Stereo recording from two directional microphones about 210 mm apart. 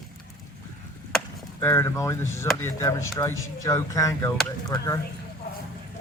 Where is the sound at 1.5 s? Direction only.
15° left (ahead or behind).